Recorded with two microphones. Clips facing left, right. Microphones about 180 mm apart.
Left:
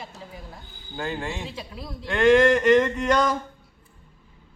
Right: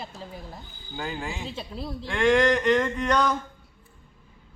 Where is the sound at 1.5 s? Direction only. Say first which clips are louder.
Right 2 dB; 30° right (ahead or behind).